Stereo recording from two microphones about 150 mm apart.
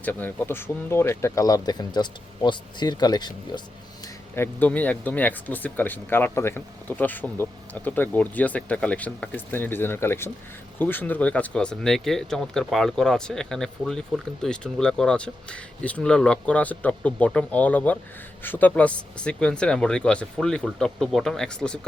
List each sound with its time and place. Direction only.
0.0 s speech: 10° left (ahead or behind); by 3.6 s 30° left (ahead or behind)
4.4 s speech: 10° left (ahead or behind)